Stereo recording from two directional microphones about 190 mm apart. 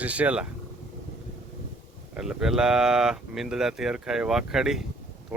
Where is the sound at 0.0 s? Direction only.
5° right (ahead or behind).